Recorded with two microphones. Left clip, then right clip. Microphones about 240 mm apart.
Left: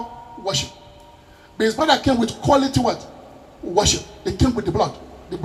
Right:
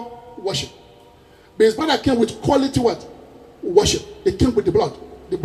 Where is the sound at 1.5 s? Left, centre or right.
Right.